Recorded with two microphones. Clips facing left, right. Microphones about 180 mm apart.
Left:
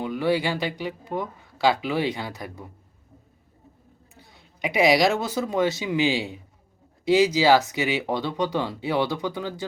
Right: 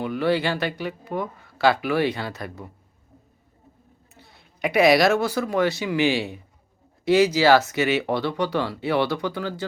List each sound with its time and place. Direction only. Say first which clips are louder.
0.0 s speech: right 1 dB; 15° left (ahead or behind)
4.1 s speech: right 1 dB; 15° left (ahead or behind)